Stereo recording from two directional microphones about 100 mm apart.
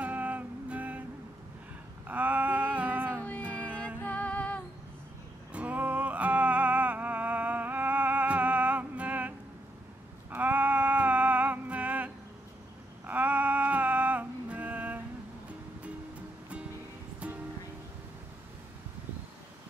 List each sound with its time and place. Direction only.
0.0 s music: 15° right (ahead or behind)
2.0 s a sound: 15° right (ahead or behind)
3.2 s music: 15° left (ahead or behind)
5.5 s music: 15° right (ahead or behind)
10.3 s a sound: 15° right (ahead or behind)
13.0 s music: 15° right (ahead or behind)